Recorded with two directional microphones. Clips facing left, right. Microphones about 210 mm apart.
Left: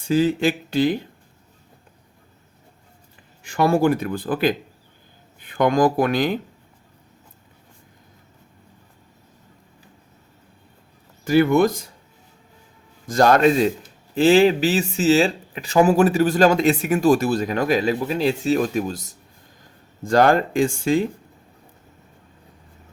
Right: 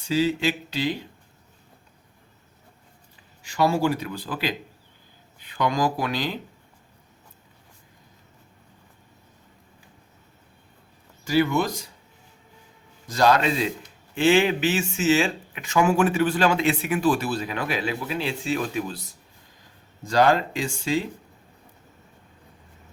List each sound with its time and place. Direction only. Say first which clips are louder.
0.0 s speech: left 4 dB; 50° left (ahead or behind)
3.4 s speech: left 4 dB; 55° left (ahead or behind)
11.3 s speech: left 6 dB; 55° left (ahead or behind)
13.1 s speech: left 5 dB; 50° left (ahead or behind)
14.2 s speech: left 5 dB; 35° left (ahead or behind); by 21.0 s 50° left (ahead or behind)